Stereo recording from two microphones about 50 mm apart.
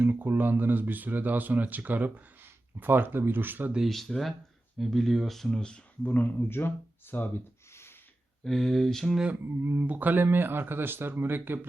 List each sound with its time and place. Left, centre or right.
0.0 s speech: right
3.8 s speech: centre
6.0 s speech: left
6.5 s speech: left
7.7 s a sound: left
8.4 s speech: centre
9.4 s a man's voice: right
9.8 s speech: right
10.2 s a man's voice: right